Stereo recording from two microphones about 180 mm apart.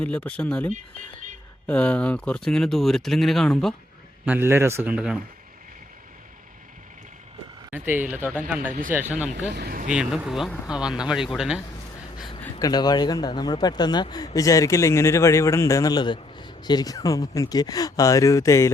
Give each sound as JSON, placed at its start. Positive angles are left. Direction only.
{"t": 0.0, "sound": "speech", "side_deg": 5}
{"t": 4.3, "sound": "speech", "side_deg": -15}
{"t": 7.7, "sound": "speech", "side_deg": -10}
{"t": 9.5, "sound": "speech", "side_deg": -60}
{"t": 9.9, "sound": "speech", "side_deg": -5}
{"t": 12.5, "sound": "speech", "side_deg": 20}